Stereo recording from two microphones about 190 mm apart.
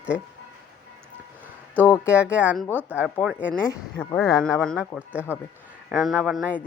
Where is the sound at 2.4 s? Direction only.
5° right (ahead or behind).